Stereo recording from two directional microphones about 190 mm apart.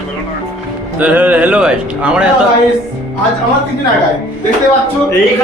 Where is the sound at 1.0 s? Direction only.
10° right (ahead or behind).